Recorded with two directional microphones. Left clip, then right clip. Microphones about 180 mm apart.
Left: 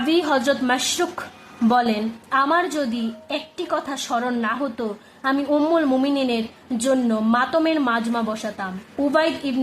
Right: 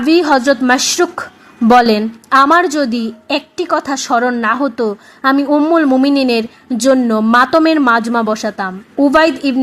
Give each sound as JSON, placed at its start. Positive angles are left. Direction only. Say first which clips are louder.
{"t": 0.0, "sound": "a woman's voice", "louder": "right 9 dB", "side_deg": -25}
{"t": 5.5, "sound": "a woman's voice", "louder": "right 7 dB", "side_deg": -20}
{"t": 6.0, "sound": "a woman's voice", "louder": "right 9 dB", "side_deg": -35}